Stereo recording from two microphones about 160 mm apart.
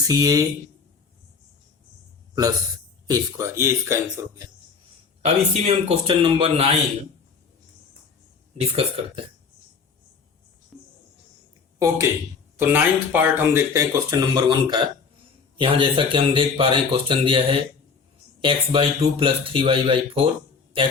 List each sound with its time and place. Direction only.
0.0 s speech: 25° right (ahead or behind)
3.1 s speech: 20° right (ahead or behind)
5.2 s speech: 40° right (ahead or behind)
8.5 s speech: 40° right (ahead or behind)
11.8 s speech: 20° right (ahead or behind)
14.1 s speech: 25° right (ahead or behind)